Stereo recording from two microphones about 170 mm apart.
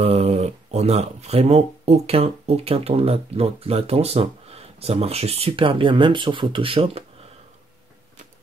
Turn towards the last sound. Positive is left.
turn(degrees=-35)  # may be behind; listen again after turning